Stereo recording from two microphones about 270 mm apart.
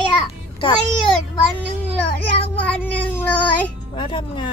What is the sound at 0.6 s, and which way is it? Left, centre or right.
Speech, centre.